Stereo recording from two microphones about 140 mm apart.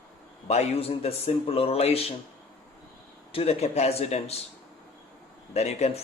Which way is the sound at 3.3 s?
45° left (ahead or behind).